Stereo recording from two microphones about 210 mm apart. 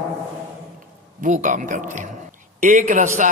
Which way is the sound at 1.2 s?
35° right (ahead or behind).